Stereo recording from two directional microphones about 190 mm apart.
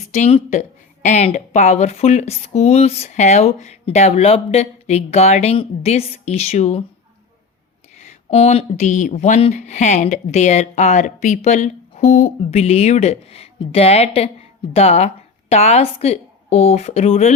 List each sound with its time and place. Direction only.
0.1 s speech: 35° left (ahead or behind)
7.9 s a woman's voice: 35° left (ahead or behind)